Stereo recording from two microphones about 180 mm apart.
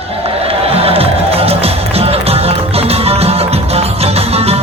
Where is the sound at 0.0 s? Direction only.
35° right (ahead or behind).